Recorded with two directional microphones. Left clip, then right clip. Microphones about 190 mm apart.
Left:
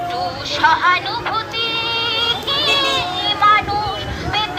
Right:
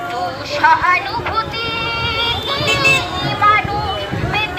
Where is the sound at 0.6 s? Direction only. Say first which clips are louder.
Right 2 dB; 10° right (ahead or behind).